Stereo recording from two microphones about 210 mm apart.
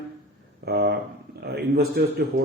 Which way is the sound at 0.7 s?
50° right (ahead or behind).